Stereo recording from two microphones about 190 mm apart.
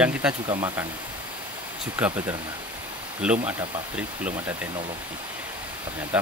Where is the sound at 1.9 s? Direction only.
10° right (ahead or behind).